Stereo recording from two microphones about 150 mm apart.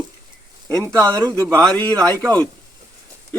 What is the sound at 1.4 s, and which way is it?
Speech, 20° right (ahead or behind).